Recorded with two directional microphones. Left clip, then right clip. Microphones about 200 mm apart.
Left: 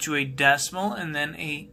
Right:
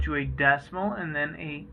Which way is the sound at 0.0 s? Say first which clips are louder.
Left 3 dB; 40° left (ahead or behind).